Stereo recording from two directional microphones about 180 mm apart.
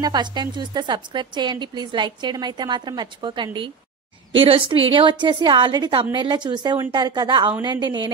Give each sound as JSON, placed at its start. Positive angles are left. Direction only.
{"t": 0.0, "sound": "a woman's voice", "side_deg": -25}